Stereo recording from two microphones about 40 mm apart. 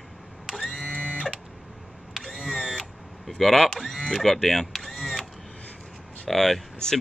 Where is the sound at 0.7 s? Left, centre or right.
Left.